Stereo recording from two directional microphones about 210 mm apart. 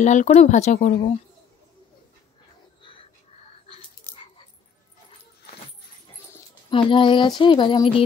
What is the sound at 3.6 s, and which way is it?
Dog, 25° left (ahead or behind).